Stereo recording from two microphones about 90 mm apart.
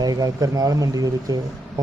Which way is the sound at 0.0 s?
45° right (ahead or behind).